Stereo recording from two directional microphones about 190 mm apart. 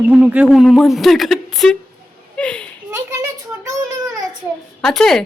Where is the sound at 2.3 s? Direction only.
5° left (ahead or behind).